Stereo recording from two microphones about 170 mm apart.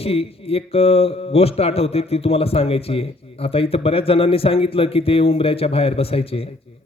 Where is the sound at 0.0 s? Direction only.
35° left (ahead or behind).